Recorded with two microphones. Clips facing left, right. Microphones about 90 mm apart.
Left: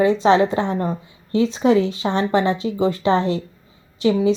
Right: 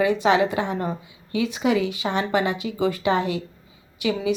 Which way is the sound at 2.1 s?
15° right (ahead or behind).